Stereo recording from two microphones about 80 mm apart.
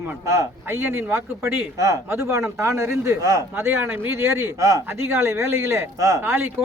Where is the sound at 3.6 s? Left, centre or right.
Right.